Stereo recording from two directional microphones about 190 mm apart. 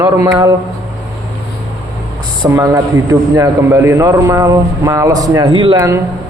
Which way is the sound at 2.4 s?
15° right (ahead or behind).